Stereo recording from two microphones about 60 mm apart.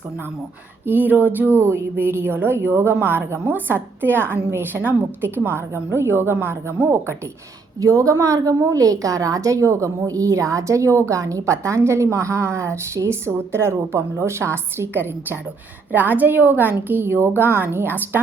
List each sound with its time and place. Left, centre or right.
0.9 s speech: right
7.8 s a woman's voice: right